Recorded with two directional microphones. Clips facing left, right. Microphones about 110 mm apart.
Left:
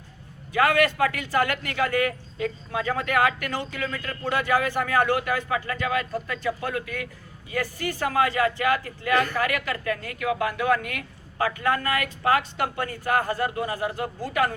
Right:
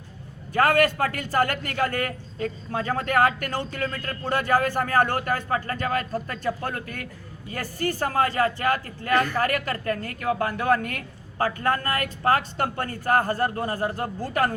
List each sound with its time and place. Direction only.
0.5 s a man's voice: 40° right (ahead or behind)